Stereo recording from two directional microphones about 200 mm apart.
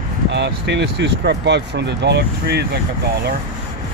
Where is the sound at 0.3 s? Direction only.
60° right (ahead or behind).